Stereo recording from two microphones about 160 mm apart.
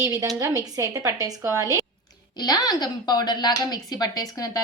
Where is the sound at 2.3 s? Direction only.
25° left (ahead or behind).